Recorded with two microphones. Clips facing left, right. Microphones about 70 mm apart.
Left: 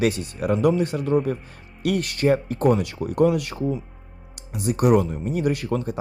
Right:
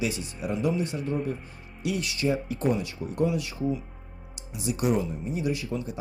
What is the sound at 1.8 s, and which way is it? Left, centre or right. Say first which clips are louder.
Speech: left 7 dB; left.